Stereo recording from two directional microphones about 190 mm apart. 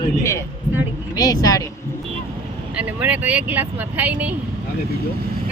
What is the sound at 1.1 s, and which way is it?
Speech, 20° left (ahead or behind).